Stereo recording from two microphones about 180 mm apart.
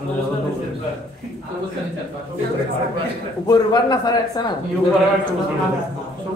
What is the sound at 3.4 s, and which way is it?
A man's voice, 20° left (ahead or behind).